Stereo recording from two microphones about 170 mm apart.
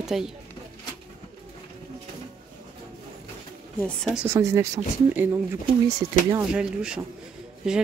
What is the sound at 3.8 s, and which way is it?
Speech, 5° left (ahead or behind).